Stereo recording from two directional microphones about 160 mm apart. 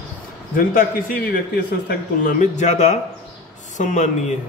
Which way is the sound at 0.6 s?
60° left (ahead or behind).